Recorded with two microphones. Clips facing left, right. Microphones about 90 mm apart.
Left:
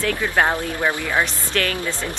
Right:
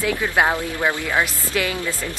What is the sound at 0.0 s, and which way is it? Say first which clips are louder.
Speech: even; 10° right (ahead or behind).